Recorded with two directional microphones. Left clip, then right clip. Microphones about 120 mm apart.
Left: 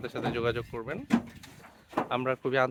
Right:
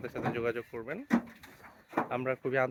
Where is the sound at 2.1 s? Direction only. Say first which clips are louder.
Left 3 dB; 25° left (ahead or behind).